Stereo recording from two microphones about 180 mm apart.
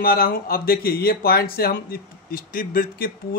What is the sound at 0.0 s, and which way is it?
Speech, 55° left (ahead or behind).